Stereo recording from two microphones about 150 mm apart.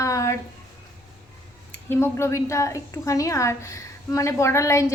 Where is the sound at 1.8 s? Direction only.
15° left (ahead or behind).